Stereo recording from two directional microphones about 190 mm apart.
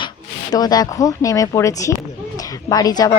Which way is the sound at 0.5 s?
20° left (ahead or behind).